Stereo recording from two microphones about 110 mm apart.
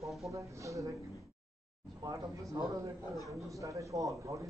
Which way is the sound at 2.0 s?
35° right (ahead or behind).